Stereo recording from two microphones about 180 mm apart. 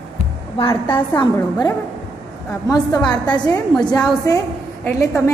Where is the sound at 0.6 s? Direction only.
30° left (ahead or behind).